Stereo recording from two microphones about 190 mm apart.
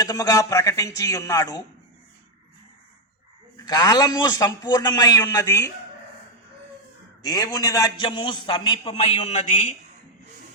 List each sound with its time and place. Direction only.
0.0 s a man's voice: 20° left (ahead or behind)
3.7 s a man's voice: 20° left (ahead or behind)
7.2 s a man's voice: 20° left (ahead or behind)